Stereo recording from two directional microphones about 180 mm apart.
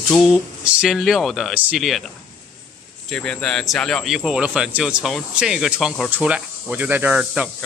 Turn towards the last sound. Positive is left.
turn(degrees=-5)  # may be behind; listen again after turning